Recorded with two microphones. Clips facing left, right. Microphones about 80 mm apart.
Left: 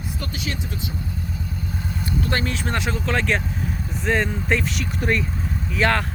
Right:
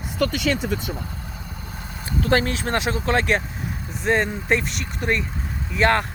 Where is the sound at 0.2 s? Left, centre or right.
Right.